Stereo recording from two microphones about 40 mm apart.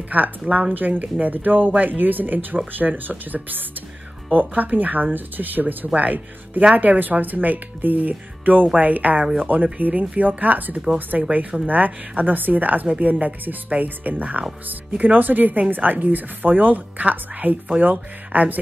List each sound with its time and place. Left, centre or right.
0.1 s speech: right
4.6 s speech: right